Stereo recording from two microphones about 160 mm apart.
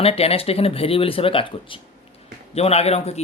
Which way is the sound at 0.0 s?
40° left (ahead or behind).